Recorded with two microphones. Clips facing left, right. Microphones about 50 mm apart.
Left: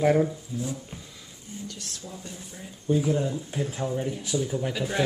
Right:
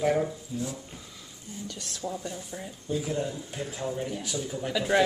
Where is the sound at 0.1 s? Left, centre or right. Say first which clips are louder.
Left 4 dB; centre.